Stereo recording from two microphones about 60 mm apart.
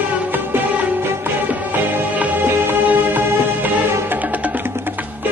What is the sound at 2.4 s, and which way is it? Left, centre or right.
Music, right.